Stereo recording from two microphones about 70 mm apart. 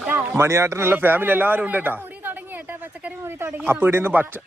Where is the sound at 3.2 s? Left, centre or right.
Right.